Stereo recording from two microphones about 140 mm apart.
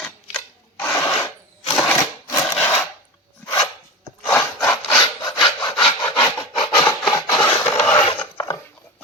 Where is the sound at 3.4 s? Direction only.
30° left (ahead or behind).